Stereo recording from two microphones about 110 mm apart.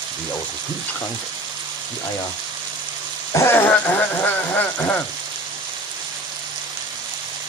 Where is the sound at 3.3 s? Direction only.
20° left (ahead or behind).